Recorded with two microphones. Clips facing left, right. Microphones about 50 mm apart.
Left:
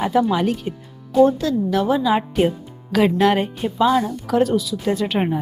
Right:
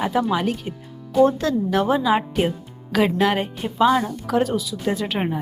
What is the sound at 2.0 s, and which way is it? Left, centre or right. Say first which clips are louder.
Speech: left 2 dB; centre.